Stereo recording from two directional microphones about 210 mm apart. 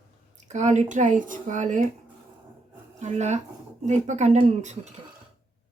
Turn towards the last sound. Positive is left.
turn(degrees=-35)  # may be behind; listen again after turning